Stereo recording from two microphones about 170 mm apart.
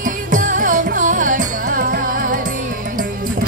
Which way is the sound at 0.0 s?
50° right (ahead or behind).